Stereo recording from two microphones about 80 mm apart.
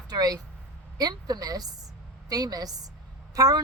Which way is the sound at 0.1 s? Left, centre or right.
Right.